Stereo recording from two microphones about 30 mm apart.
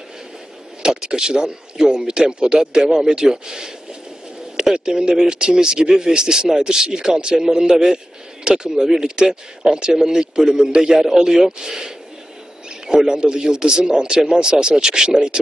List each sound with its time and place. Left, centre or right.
0.8 s a man's voice: right
4.7 s a man's voice: right
7.5 s a man's voice: centre